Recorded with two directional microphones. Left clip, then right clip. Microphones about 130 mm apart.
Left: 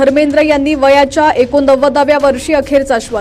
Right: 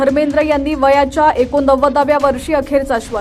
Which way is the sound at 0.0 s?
20° left (ahead or behind).